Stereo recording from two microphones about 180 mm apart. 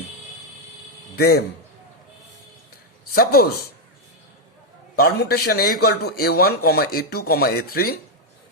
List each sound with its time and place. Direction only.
1.1 s a man's voice: 60° left (ahead or behind)
3.2 s a man's voice: 60° left (ahead or behind)
4.9 s a man's voice: 60° left (ahead or behind)